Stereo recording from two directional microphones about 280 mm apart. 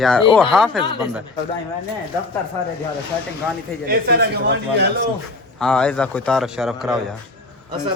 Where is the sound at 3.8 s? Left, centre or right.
Right.